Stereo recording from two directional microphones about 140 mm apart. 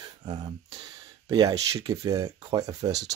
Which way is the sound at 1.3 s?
25° right (ahead or behind).